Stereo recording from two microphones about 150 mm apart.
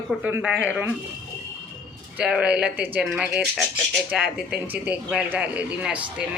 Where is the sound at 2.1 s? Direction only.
5° right (ahead or behind).